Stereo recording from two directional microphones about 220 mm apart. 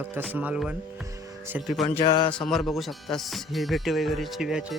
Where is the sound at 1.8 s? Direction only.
25° left (ahead or behind).